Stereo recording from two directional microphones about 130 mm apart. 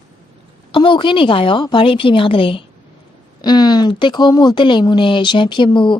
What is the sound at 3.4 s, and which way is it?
Speech, 30° left (ahead or behind).